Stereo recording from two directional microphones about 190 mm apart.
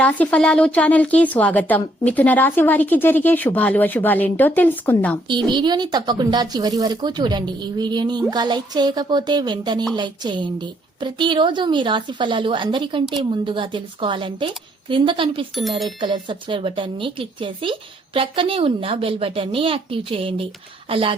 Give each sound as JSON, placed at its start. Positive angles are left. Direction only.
{"t": 0.0, "sound": "a woman's voice", "side_deg": 5}
{"t": 5.3, "sound": "speech", "side_deg": -25}